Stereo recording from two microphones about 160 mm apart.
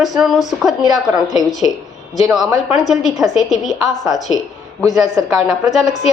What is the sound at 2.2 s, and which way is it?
Speech, centre (ahead or behind).